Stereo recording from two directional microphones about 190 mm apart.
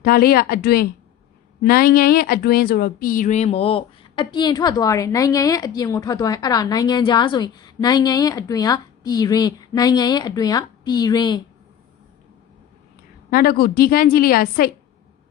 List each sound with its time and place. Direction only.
0.0 s a woman's voice: 50° left (ahead or behind); by 11.4 s 20° left (ahead or behind)
13.3 s a woman's voice: 50° left (ahead or behind)